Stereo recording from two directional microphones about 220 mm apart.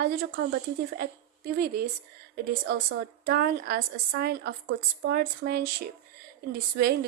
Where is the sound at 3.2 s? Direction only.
45° right (ahead or behind).